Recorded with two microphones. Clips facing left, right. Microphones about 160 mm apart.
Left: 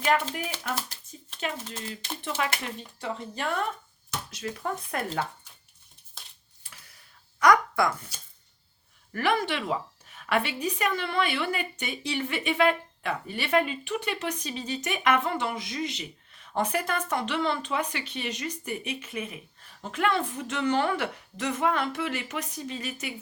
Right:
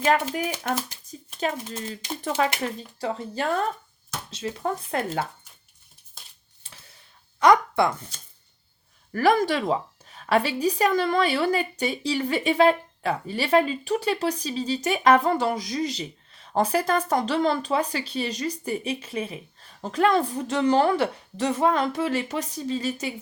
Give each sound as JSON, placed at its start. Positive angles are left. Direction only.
{"t": 0.0, "sound": "speech", "side_deg": -40}
{"t": 1.4, "sound": "a woman's voice", "side_deg": -40}
{"t": 6.6, "sound": "a sound", "side_deg": -30}
{"t": 9.1, "sound": "a woman's voice", "side_deg": -40}